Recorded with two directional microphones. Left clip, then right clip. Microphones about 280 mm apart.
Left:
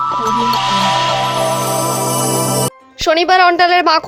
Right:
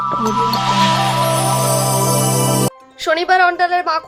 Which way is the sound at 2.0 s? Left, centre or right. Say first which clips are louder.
Left 1 dB; centre.